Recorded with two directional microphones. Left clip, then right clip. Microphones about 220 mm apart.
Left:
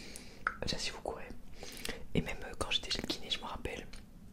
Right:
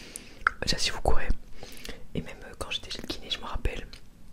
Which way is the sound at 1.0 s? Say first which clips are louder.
Right 12 dB; 40° right (ahead or behind).